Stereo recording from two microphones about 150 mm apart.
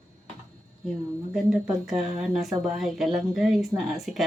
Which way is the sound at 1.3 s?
5° right (ahead or behind).